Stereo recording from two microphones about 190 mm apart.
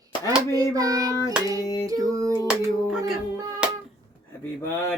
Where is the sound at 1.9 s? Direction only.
15° right (ahead or behind).